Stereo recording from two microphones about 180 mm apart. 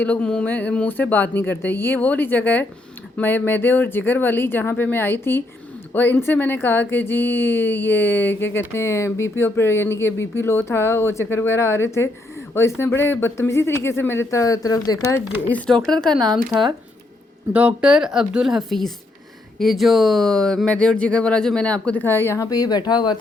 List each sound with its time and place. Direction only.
0.0 s speech: 5° left (ahead or behind)
15.4 s speech: 5° left (ahead or behind)
17.5 s speech: 5° right (ahead or behind); by 23.1 s 25° left (ahead or behind)